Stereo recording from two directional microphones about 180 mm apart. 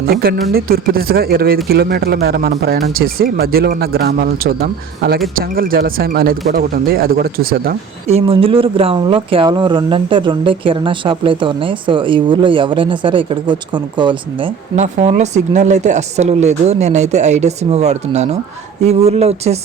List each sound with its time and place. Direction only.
0.0 s speech: 60° right (ahead or behind)
8.0 s speech: 35° right (ahead or behind)
14.8 s speech: 40° right (ahead or behind)